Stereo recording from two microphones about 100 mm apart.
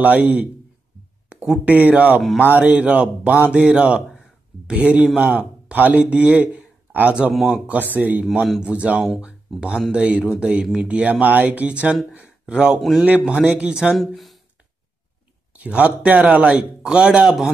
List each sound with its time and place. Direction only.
0.0 s speech: 15° right (ahead or behind)
7.3 s speech: centre (ahead or behind)
7.9 s speech: 15° right (ahead or behind); by 14.4 s centre (ahead or behind)
15.5 s speech: 15° right (ahead or behind)